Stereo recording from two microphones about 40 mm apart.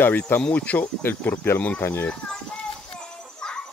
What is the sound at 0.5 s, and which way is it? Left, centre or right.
Speech, left.